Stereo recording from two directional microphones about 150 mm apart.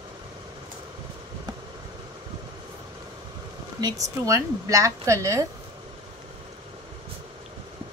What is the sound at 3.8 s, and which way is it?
Speech, 20° right (ahead or behind).